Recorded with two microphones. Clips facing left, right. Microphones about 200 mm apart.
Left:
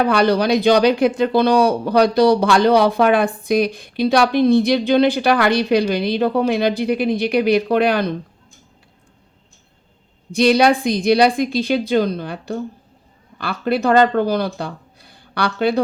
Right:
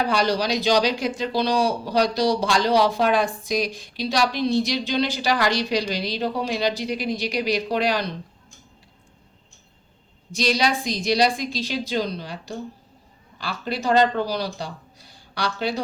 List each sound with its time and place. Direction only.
0.0 s speech: 55° left (ahead or behind)
10.3 s speech: 55° left (ahead or behind)